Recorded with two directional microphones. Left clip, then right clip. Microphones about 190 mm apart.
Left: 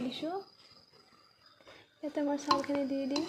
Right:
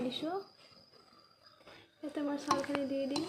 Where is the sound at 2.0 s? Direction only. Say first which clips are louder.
Left 4 dB; 5° left (ahead or behind).